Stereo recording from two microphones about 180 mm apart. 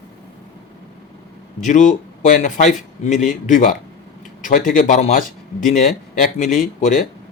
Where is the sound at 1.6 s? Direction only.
45° left (ahead or behind).